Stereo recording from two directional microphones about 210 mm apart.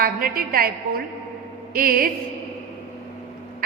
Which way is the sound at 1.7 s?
45° right (ahead or behind).